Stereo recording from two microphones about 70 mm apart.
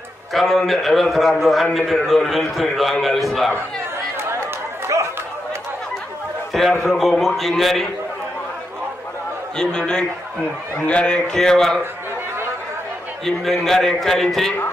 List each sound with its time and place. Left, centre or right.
0.3 s a man's voice: centre
6.8 s a man's voice: centre
9.6 s speech: centre
13.2 s a man's voice: centre